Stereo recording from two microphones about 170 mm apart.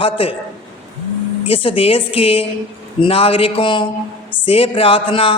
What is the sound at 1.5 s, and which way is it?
A woman's voice, 35° left (ahead or behind).